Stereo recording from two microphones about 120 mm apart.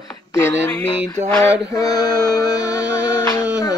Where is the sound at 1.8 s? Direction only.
30° left (ahead or behind).